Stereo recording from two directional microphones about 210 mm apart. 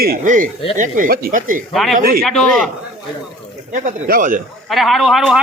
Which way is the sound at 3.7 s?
40° right (ahead or behind).